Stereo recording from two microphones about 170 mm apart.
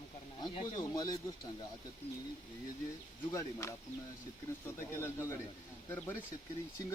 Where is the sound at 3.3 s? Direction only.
20° left (ahead or behind).